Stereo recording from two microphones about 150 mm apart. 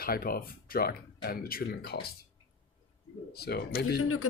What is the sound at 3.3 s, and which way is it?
Speech, 90° left.